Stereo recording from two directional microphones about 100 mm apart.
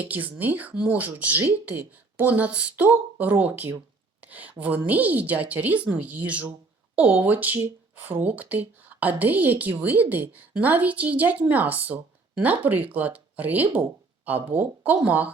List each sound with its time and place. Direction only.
0.0 s speech: 15° right (ahead or behind)